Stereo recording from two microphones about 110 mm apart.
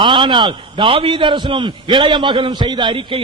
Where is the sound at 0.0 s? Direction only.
50° right (ahead or behind).